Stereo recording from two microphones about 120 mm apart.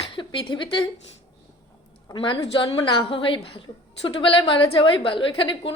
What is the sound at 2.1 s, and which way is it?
Speech, 45° left (ahead or behind).